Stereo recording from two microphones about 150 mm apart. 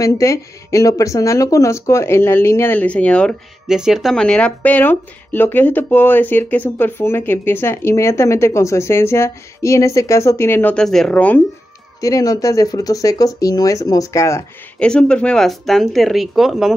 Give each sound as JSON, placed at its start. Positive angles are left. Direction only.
{"t": 0.0, "sound": "speech", "side_deg": 20}
{"t": 3.6, "sound": "speech", "side_deg": -5}
{"t": 12.0, "sound": "speech", "side_deg": 25}
{"t": 14.8, "sound": "speech", "side_deg": 5}